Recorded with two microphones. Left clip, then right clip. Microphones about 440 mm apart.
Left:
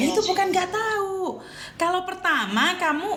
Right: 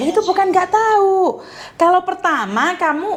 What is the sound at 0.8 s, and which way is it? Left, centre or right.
Speech, right.